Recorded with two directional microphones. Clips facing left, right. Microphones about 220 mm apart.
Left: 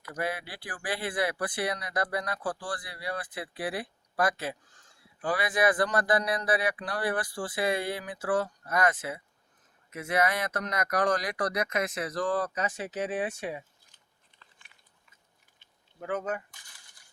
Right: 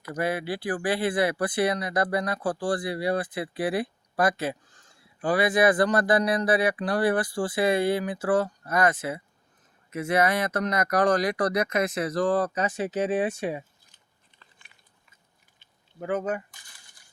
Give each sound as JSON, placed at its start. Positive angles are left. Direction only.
{"t": 0.1, "sound": "speech", "side_deg": -25}
{"t": 16.0, "sound": "speech", "side_deg": -15}